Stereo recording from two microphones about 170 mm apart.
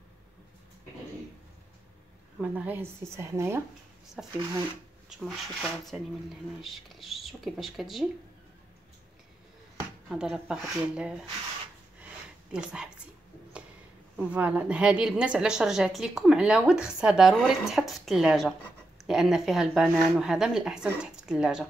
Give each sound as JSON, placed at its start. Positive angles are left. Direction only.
{"t": 2.4, "sound": "speech", "side_deg": -10}
{"t": 4.2, "sound": "a woman's voice", "side_deg": 0}
{"t": 10.0, "sound": "a woman's voice", "side_deg": -5}
{"t": 12.5, "sound": "a woman's voice", "side_deg": -5}
{"t": 14.1, "sound": "a woman's voice", "side_deg": -5}